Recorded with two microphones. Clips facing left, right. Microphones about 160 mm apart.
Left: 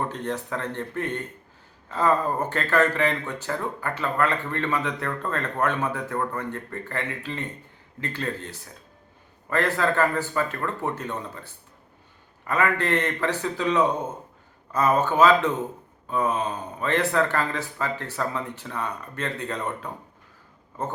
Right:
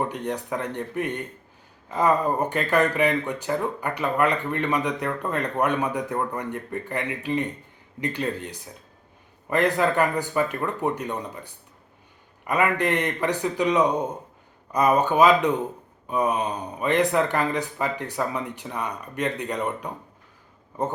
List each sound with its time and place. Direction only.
0.1 s speech: 15° right (ahead or behind)